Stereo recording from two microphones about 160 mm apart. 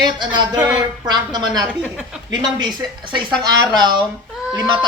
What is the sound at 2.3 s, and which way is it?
A man's voice, 25° right (ahead or behind).